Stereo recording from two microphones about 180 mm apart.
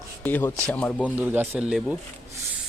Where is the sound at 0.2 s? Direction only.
10° left (ahead or behind).